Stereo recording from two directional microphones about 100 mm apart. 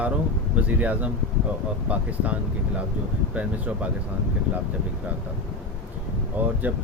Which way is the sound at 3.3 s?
15° right (ahead or behind).